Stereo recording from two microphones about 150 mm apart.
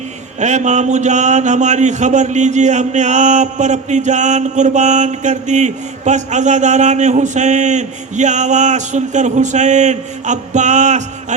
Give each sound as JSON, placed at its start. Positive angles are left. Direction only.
{"t": 0.3, "sound": "speech", "side_deg": -50}